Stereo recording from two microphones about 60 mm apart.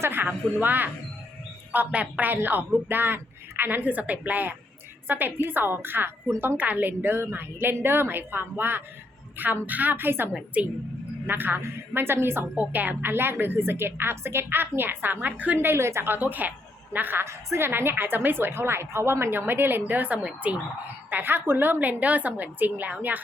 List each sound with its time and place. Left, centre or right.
0.0 s a woman's voice: right
10.6 s a woman's voice: right
11.3 s a woman's voice: right
15.5 s a woman's voice: right
17.2 s a woman's voice: right
21.1 s a woman's voice: right